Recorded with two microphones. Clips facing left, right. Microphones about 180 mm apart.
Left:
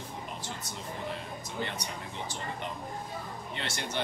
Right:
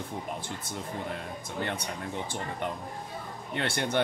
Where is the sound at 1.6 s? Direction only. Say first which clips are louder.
Right 5 dB; 55° right (ahead or behind).